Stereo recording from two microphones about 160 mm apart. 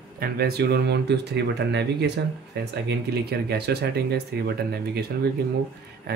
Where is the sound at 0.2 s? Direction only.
75° right (ahead or behind).